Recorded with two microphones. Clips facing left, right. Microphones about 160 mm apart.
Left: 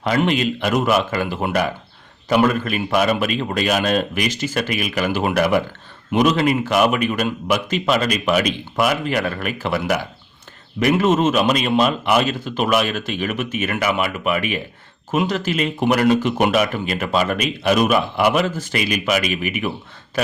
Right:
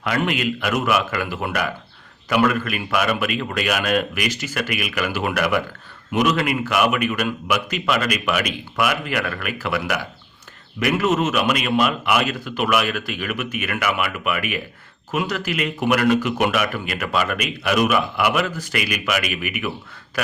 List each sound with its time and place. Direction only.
0.0 s speech: 30° left (ahead or behind)